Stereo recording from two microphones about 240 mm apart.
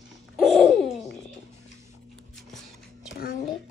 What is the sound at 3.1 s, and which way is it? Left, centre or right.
Speech, left.